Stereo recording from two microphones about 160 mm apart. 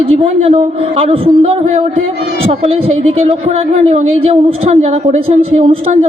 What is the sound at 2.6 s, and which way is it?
A woman's voice, 40° right (ahead or behind).